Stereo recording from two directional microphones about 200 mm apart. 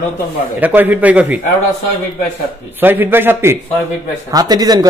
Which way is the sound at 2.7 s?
10° right (ahead or behind).